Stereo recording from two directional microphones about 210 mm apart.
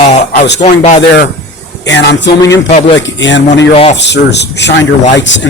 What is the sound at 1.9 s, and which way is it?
Speech, 55° left (ahead or behind).